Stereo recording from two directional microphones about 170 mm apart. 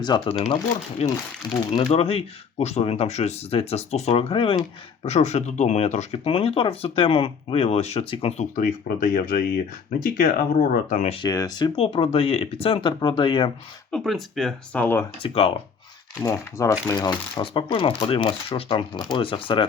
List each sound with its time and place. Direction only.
0.0 s speech: 25° left (ahead or behind)
0.3 s speech: 40° left (ahead or behind)
8.5 s speech: 55° left (ahead or behind)
11.1 s speech: 25° left (ahead or behind)
11.8 s speech: 35° left (ahead or behind)
13.9 s speech: centre (ahead or behind)
15.2 s speech: 35° left (ahead or behind)
16.2 s speech: 20° left (ahead or behind)